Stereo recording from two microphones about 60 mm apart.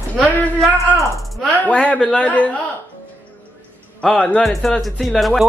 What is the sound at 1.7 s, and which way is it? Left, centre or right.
Speech, centre.